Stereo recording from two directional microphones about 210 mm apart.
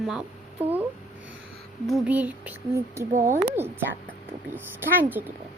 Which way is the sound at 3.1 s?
40° right (ahead or behind).